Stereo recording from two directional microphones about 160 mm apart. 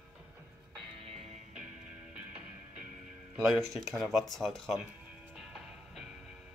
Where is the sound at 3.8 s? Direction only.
Centre (ahead or behind).